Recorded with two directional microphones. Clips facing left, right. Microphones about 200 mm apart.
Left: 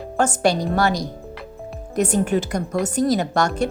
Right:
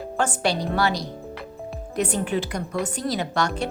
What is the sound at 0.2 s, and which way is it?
A woman's voice, 45° left (ahead or behind).